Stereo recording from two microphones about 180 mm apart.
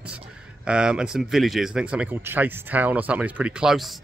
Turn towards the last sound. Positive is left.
turn(degrees=0)  # may be behind; listen again after turning